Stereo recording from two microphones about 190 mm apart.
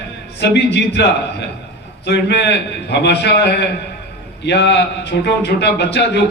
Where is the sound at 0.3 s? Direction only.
65° left (ahead or behind).